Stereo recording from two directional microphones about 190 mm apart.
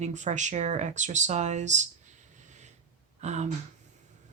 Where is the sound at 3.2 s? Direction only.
35° right (ahead or behind).